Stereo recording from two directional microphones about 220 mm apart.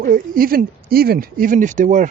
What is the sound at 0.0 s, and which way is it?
Speech, 40° right (ahead or behind).